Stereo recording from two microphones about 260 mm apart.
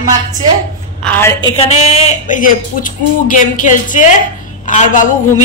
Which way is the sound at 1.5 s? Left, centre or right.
Left.